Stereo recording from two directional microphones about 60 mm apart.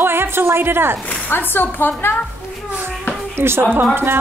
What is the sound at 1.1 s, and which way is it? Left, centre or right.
A woman's voice, left.